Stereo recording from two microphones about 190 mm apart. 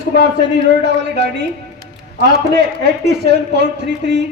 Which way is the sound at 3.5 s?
65° right (ahead or behind).